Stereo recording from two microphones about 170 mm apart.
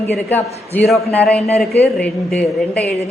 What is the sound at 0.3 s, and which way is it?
A woman's voice, 10° left (ahead or behind).